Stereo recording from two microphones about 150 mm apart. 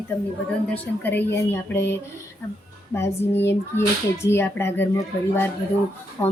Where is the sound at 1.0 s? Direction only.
15° left (ahead or behind).